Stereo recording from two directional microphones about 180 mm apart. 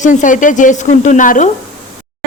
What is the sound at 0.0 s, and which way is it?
Speech, 45° left (ahead or behind).